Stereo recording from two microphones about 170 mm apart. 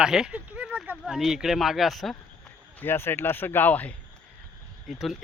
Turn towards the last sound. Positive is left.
turn(degrees=0)  # may be behind; listen again after turning